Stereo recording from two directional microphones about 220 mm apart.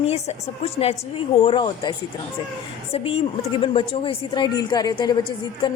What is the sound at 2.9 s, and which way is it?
A woman's voice, 25° left (ahead or behind).